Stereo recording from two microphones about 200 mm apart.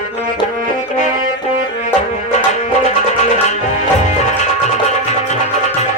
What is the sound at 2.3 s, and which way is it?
Music, 35° left (ahead or behind).